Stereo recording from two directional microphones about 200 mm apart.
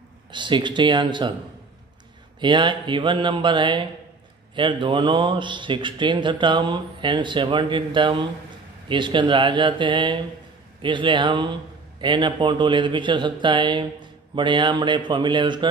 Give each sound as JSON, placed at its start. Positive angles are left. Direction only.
{"t": 0.3, "sound": "a man's voice", "side_deg": -25}
{"t": 2.4, "sound": "a man's voice", "side_deg": -20}